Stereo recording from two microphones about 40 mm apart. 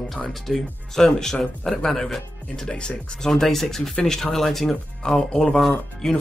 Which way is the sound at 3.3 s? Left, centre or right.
Centre.